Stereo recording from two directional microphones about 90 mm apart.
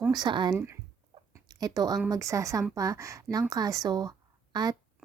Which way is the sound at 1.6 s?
45° right (ahead or behind).